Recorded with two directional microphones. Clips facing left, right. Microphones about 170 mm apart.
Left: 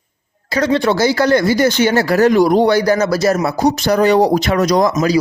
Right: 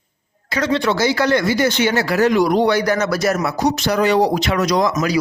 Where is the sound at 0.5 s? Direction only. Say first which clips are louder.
Left 4 dB; 35° left (ahead or behind).